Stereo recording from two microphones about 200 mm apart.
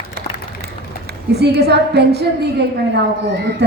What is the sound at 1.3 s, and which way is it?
A woman's voice, 55° right (ahead or behind).